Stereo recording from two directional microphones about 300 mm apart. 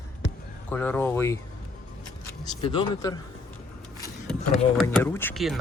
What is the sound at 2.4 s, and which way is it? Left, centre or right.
Speech, centre.